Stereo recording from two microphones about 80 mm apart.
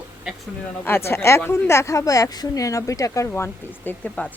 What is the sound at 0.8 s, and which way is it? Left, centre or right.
A woman's voice, left.